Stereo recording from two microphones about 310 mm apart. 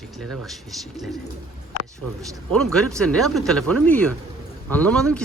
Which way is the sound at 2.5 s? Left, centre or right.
Centre.